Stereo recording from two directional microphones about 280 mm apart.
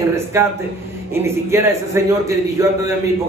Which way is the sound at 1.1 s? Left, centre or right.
Centre.